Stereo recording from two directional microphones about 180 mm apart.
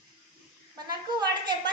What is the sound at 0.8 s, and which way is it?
Speech, 25° right (ahead or behind).